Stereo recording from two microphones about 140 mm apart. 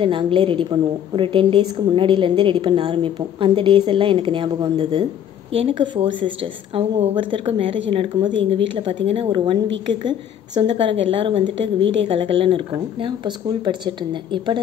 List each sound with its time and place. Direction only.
0.0 s a woman's voice: 35° right (ahead or behind)
5.5 s a woman's voice: 40° right (ahead or behind)